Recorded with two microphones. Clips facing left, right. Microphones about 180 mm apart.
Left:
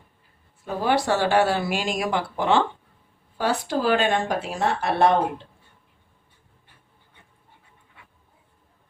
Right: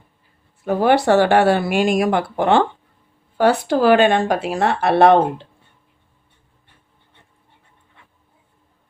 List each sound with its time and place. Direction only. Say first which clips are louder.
0.6 s speech: right 7 dB; 65° right (ahead or behind)